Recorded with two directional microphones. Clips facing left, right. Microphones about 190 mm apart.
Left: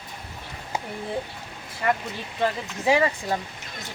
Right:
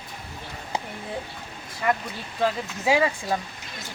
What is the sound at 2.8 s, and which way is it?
Speech, 10° right (ahead or behind).